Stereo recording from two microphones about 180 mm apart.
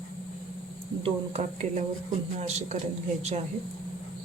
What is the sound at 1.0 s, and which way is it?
Speech, 35° right (ahead or behind).